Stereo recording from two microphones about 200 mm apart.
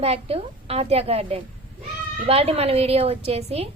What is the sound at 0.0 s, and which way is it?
A woman's voice, 30° right (ahead or behind).